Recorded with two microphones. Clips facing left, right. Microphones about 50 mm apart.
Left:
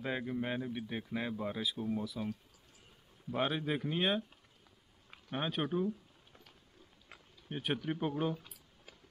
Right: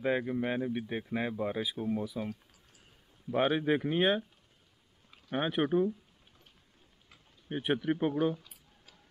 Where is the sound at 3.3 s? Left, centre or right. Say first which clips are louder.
Right 6 dB; centre.